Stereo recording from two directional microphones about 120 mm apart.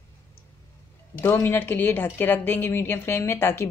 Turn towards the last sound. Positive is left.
turn(degrees=20)  # may be behind; listen again after turning